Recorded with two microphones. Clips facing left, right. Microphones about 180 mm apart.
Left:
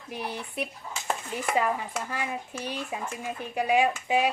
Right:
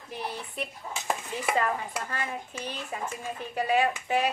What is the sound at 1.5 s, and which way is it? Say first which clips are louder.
Speech: left 3 dB; 10° left (ahead or behind).